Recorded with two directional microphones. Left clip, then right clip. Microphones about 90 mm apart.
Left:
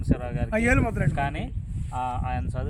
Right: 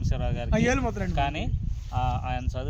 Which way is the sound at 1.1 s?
25° right (ahead or behind).